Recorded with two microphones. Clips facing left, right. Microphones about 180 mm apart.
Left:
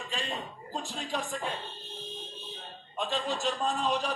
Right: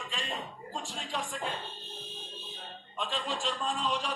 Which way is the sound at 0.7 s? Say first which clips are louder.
Left 4 dB; 45° left (ahead or behind).